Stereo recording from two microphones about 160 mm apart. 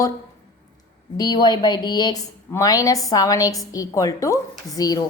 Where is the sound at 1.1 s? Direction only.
25° left (ahead or behind).